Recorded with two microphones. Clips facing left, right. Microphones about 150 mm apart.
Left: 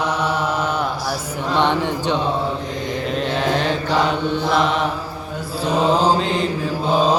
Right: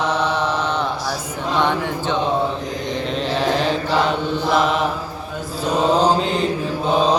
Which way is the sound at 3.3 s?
Centre (ahead or behind).